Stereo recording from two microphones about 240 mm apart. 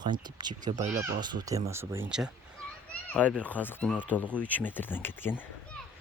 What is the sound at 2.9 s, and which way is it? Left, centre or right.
A child's voice, centre.